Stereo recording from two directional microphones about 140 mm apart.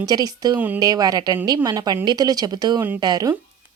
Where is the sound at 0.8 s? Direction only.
25° right (ahead or behind).